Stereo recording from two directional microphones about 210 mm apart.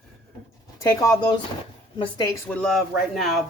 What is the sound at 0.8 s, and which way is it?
A woman's voice, 15° left (ahead or behind).